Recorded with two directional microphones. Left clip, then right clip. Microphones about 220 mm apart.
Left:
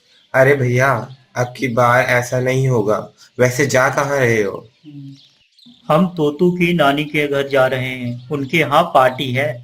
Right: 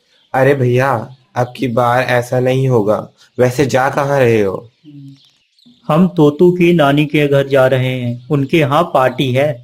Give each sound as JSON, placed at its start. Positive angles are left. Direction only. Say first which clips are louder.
{"t": 0.3, "sound": "speech", "louder": "right 1 dB", "side_deg": -45}
{"t": 5.9, "sound": "speech", "louder": "right 4 dB", "side_deg": -40}